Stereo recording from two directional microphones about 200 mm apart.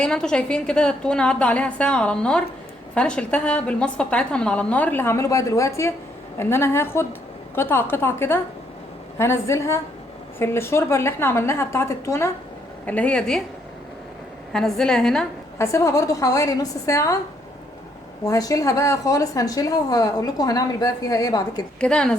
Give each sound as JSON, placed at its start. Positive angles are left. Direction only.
{"t": 0.0, "sound": "a woman's voice", "side_deg": 5}
{"t": 14.5, "sound": "a woman's voice", "side_deg": 5}
{"t": 15.5, "sound": "a woman's voice", "side_deg": 15}
{"t": 18.3, "sound": "a woman's voice", "side_deg": 15}
{"t": 21.8, "sound": "a woman's voice", "side_deg": 5}